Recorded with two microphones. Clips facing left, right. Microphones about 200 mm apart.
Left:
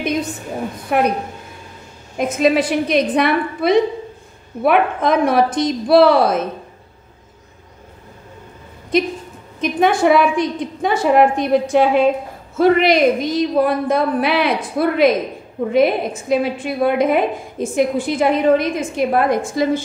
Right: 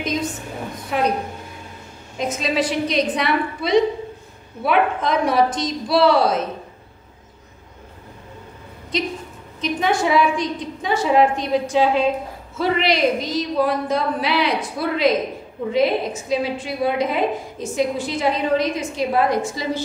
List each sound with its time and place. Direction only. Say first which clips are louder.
0.9 s a woman's voice: left 5 dB; 60° left (ahead or behind)
2.1 s a woman's voice: left 6 dB; 55° left (ahead or behind)
9.6 s a woman's voice: left 5 dB; 55° left (ahead or behind)